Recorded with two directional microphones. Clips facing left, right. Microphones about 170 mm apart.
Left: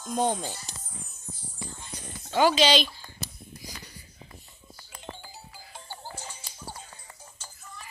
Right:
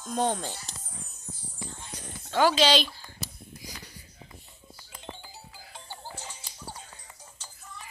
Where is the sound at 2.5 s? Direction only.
Centre (ahead or behind).